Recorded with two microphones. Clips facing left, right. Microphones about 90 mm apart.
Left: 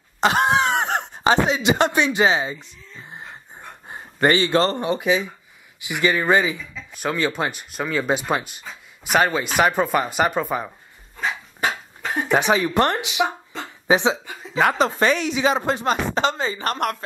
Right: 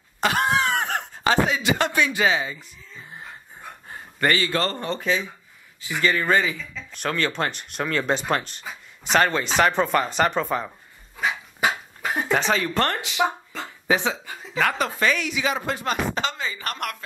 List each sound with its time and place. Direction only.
0.2 s speech: 20° left (ahead or behind)
11.1 s dog: 5° right (ahead or behind)
12.3 s speech: 15° left (ahead or behind)
13.6 s a sound: 20° left (ahead or behind)
14.5 s speech: 25° left (ahead or behind)